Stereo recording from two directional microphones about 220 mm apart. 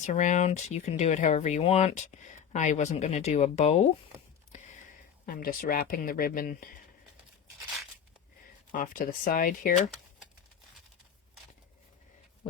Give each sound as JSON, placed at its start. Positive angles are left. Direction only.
{"t": 0.0, "sound": "speech", "side_deg": 35}
{"t": 5.2, "sound": "speech", "side_deg": 40}
{"t": 8.7, "sound": "speech", "side_deg": 40}